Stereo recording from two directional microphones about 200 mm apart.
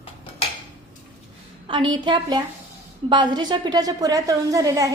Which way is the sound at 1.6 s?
25° right (ahead or behind).